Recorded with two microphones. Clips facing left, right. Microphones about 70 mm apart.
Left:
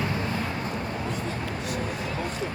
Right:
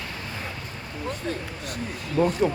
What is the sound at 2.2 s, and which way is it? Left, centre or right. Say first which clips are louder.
Speech: right 15 dB; right.